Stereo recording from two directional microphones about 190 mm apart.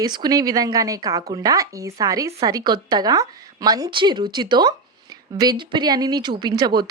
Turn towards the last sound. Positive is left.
turn(degrees=-20)  # may be behind; listen again after turning